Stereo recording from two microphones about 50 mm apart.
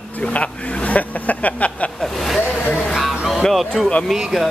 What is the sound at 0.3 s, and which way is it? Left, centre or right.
Speech, left.